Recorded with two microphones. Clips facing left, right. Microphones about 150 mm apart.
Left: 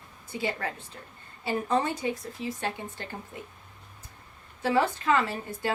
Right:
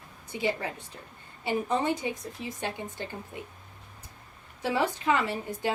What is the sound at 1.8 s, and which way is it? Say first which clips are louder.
Speech: right 1 dB; 15° right (ahead or behind).